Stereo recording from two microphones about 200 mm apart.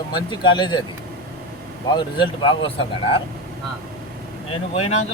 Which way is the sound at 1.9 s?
25° left (ahead or behind).